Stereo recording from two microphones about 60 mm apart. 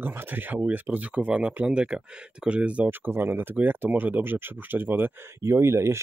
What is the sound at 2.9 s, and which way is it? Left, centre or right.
Speech, right.